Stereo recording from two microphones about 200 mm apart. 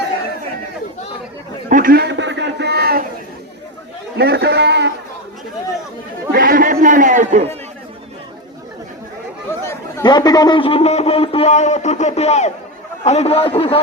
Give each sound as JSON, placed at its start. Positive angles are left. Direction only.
{"t": 1.7, "sound": "a sound", "side_deg": -45}
{"t": 4.2, "sound": "a man's voice", "side_deg": -55}
{"t": 6.3, "sound": "chatter", "side_deg": -45}
{"t": 9.5, "sound": "a man's voice", "side_deg": 15}